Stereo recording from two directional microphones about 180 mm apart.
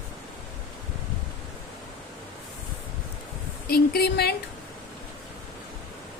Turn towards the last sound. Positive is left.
turn(degrees=60)  # may be behind; listen again after turning